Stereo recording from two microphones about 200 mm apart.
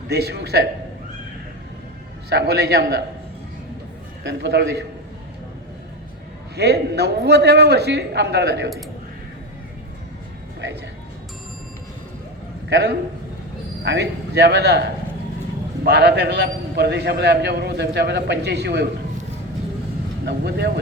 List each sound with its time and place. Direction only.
0.1 s a man's voice: 55° right (ahead or behind)
2.3 s a man's voice: 55° right (ahead or behind)
4.2 s a man's voice: 60° right (ahead or behind)
6.6 s a man's voice: 55° right (ahead or behind)
12.6 s a man's voice: 55° right (ahead or behind)
20.2 s a man's voice: 55° right (ahead or behind)